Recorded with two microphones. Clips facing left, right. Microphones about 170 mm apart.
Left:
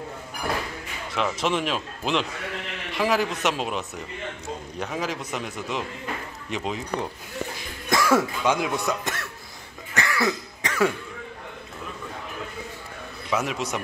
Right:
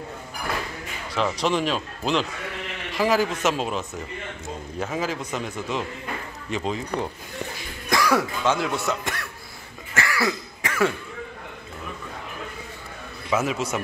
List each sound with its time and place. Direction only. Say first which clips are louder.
1.1 s a man's voice: right 2 dB; centre (ahead or behind)
7.9 s cough: left 1 dB; 25° left (ahead or behind)
8.5 s a man's voice: right 2 dB; 15° left (ahead or behind)
9.9 s cough: even; 20° left (ahead or behind)
13.3 s a man's voice: right 2 dB; centre (ahead or behind)